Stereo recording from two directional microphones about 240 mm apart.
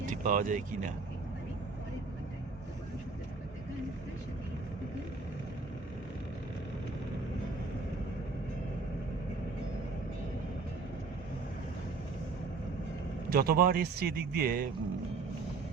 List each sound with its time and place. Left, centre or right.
0.0 s speech: right
13.3 s a man's voice: right